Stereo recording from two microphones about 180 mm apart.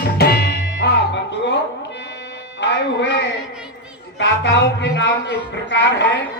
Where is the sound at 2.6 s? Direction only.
75° left (ahead or behind).